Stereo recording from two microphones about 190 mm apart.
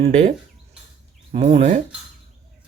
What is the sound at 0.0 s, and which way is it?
Speech, 35° right (ahead or behind).